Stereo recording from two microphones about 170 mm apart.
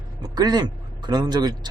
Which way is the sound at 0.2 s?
25° right (ahead or behind).